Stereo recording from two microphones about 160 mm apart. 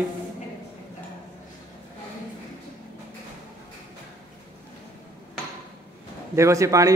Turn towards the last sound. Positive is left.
turn(degrees=-20)  # may be behind; listen again after turning